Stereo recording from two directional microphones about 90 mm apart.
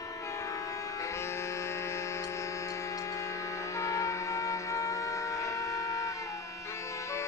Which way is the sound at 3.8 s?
35° left (ahead or behind).